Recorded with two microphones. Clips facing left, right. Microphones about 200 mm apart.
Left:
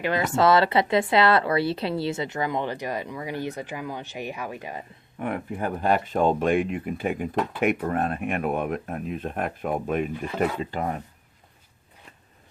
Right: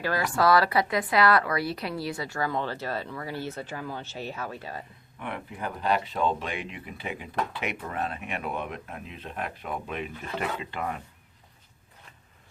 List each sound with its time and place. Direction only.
0.0 s speech: 20° left (ahead or behind)
5.2 s speech: 45° left (ahead or behind)